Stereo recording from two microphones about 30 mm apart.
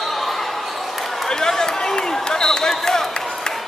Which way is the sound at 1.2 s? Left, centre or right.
Centre.